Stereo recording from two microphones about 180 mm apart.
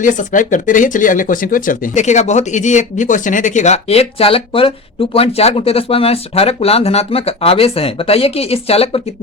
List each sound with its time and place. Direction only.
0.0 s speech: 45° left (ahead or behind)